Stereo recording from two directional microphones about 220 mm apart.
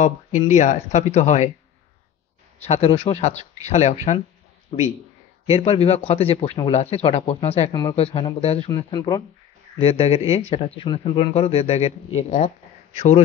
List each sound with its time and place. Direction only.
0.0 s speech: 30° left (ahead or behind)
2.6 s speech: 30° left (ahead or behind)
5.5 s speech: 30° left (ahead or behind)